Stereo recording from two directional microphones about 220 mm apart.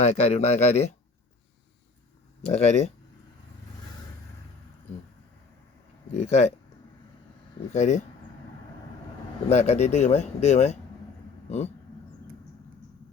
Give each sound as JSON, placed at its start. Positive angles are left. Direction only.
{"t": 0.0, "sound": "speech", "side_deg": 30}
{"t": 2.5, "sound": "speech", "side_deg": 30}
{"t": 6.1, "sound": "speech", "side_deg": 30}
{"t": 7.7, "sound": "speech", "side_deg": 30}
{"t": 9.5, "sound": "speech", "side_deg": 30}